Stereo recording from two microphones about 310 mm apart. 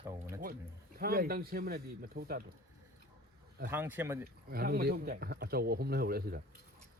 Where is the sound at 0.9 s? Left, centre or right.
Right.